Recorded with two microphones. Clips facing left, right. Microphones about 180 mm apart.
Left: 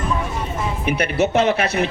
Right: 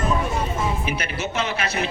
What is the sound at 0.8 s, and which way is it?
A man's voice, 60° left (ahead or behind).